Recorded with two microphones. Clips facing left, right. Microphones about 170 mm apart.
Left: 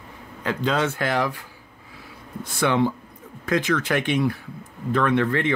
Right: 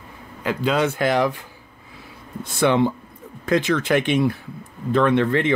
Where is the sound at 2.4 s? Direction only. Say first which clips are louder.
Right 3 dB; 25° right (ahead or behind).